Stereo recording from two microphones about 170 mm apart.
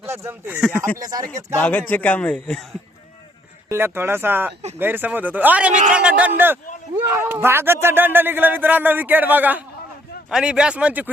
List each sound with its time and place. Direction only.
0.0 s speech: 15° right (ahead or behind)
1.5 s speech: 10° left (ahead or behind)
3.7 s speech: 15° right (ahead or behind)